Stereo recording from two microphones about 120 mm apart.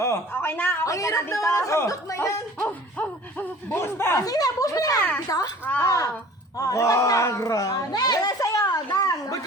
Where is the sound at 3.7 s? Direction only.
20° left (ahead or behind).